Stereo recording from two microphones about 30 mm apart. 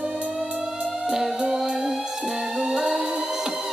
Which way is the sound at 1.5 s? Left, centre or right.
Centre.